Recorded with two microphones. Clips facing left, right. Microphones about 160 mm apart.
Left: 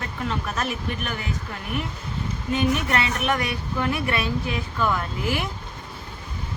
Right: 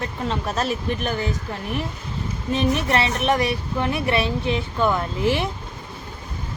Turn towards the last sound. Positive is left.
turn(degrees=-25)  # may be behind; listen again after turning